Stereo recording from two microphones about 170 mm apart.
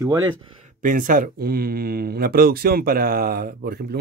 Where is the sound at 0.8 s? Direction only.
50° right (ahead or behind).